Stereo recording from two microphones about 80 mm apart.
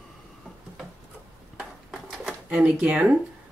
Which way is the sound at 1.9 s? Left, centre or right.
Centre.